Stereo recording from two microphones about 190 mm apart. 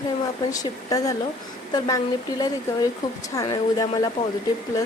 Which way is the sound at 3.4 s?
20° left (ahead or behind).